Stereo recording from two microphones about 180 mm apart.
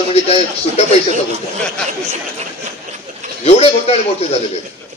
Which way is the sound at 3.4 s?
35° left (ahead or behind).